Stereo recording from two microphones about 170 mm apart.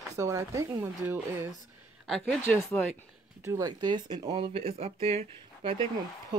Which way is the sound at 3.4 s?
20° right (ahead or behind).